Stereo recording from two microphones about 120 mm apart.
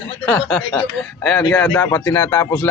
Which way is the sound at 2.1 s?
25° left (ahead or behind).